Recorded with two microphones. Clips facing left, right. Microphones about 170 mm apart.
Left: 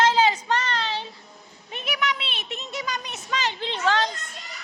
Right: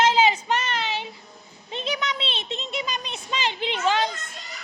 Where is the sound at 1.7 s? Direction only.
20° right (ahead or behind).